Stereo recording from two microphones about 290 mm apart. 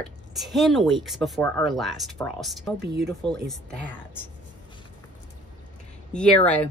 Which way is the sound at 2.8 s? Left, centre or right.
Right.